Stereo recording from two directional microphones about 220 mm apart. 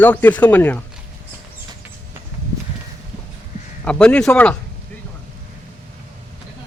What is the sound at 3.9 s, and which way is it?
Speech, 5° left (ahead or behind).